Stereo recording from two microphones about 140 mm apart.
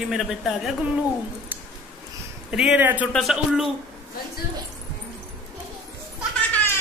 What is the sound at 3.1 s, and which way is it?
Speech, centre (ahead or behind).